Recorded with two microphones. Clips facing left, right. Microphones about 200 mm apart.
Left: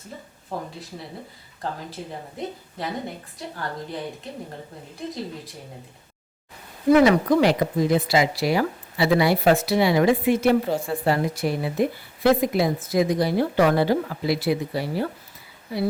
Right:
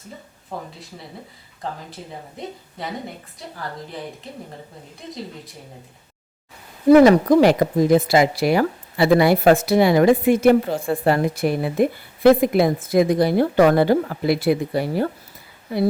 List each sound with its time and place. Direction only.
0.5 s speech: centre (ahead or behind)
6.9 s a woman's voice: 45° right (ahead or behind)